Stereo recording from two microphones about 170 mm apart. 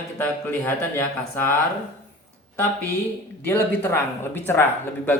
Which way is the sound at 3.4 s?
15° left (ahead or behind).